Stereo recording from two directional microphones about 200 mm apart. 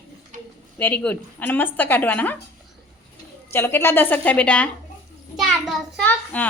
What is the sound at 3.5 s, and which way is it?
A woman's voice, 10° left (ahead or behind).